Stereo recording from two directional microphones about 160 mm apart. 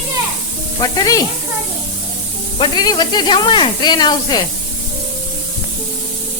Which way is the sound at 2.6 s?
25° left (ahead or behind).